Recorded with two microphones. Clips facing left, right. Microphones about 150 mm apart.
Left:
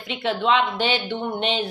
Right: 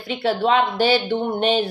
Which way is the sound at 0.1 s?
40° right (ahead or behind).